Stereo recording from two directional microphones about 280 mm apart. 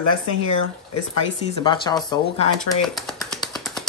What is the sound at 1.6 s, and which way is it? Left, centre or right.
Speech, centre.